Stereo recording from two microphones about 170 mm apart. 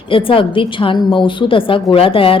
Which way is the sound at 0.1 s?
30° left (ahead or behind).